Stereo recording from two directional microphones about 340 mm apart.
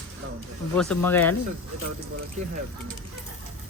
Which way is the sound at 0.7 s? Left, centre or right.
Centre.